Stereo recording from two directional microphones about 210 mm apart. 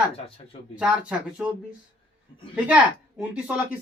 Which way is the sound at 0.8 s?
5° right (ahead or behind).